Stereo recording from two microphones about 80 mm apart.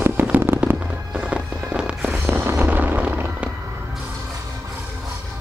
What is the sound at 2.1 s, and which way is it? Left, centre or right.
Fireworks, right.